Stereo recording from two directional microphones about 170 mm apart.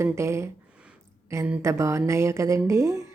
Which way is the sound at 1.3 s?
10° right (ahead or behind).